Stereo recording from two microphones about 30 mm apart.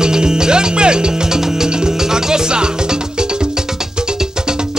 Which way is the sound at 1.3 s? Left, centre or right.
Right.